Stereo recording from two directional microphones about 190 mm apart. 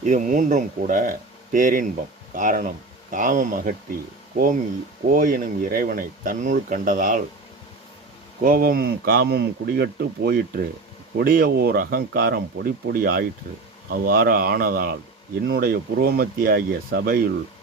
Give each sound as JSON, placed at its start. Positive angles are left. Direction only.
{"t": 0.0, "sound": "speech", "side_deg": -40}
{"t": 5.1, "sound": "speech", "side_deg": -45}
{"t": 8.4, "sound": "speech", "side_deg": -50}